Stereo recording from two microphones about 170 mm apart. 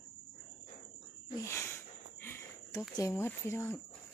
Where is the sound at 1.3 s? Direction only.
15° left (ahead or behind).